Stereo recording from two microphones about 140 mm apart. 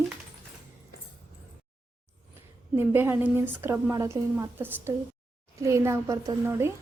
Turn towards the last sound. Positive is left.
turn(degrees=-20)  # may be behind; listen again after turning